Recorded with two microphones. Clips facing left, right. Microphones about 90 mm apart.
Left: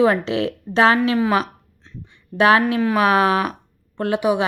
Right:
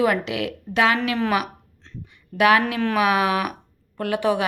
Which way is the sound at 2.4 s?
35° left (ahead or behind).